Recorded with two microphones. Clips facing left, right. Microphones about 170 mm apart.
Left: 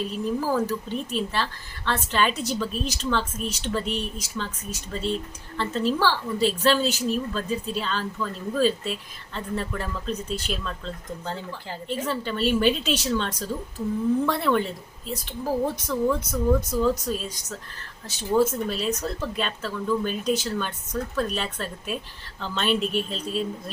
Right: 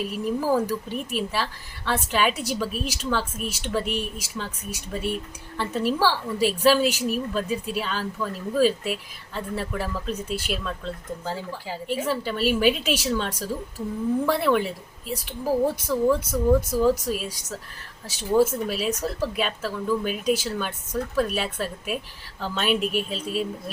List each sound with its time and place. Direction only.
0.0 s speech: 10° right (ahead or behind)